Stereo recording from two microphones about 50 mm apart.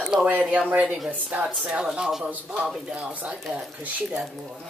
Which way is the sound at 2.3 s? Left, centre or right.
Right.